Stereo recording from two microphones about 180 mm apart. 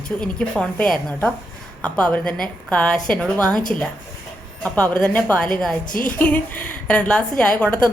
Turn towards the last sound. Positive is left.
turn(degrees=5)  # may be behind; listen again after turning